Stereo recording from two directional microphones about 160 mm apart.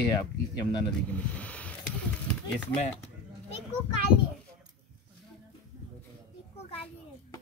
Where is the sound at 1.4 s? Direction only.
10° left (ahead or behind).